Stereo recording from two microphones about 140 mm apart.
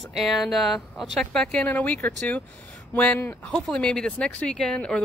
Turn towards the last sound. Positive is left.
turn(degrees=5)  # may be behind; listen again after turning